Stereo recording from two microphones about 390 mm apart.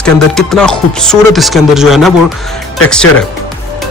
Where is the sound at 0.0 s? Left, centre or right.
Centre.